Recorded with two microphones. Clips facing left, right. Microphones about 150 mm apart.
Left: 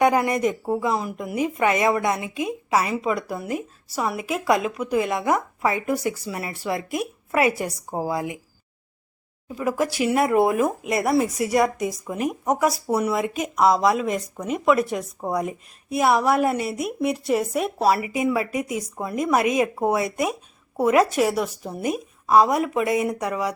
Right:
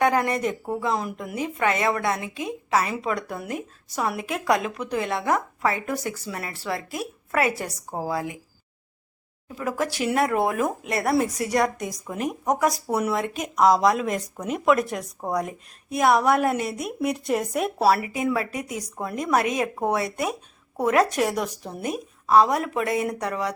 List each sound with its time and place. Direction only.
0.0 s speech: 10° left (ahead or behind)
9.6 s speech: 10° left (ahead or behind)